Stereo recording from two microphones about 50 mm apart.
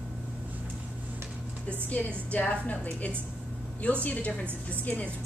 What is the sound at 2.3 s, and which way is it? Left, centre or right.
Speech, left.